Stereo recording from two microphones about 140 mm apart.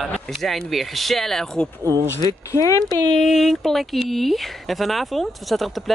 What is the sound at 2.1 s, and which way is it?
Speech, 25° left (ahead or behind).